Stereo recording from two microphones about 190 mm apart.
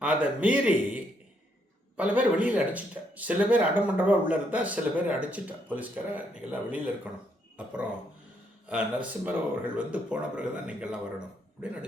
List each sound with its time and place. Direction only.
0.0 s speech: 5° right (ahead or behind)